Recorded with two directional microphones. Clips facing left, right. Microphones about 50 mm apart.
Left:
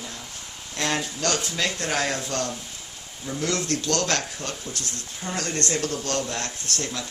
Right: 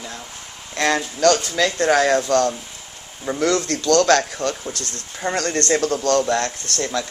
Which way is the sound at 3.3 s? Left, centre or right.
Right.